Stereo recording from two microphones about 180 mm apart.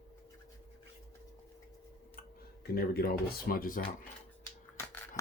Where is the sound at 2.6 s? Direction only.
60° left (ahead or behind).